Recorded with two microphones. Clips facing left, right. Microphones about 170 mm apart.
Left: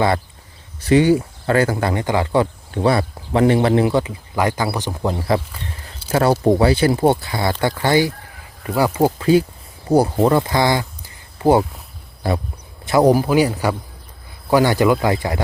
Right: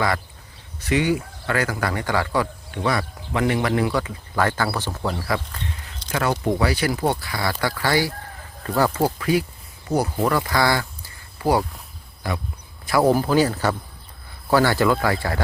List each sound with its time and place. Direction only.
0.8 s speech: 30° left (ahead or behind)
6.1 s speech: 30° left (ahead or behind)
12.8 s speech: 20° left (ahead or behind)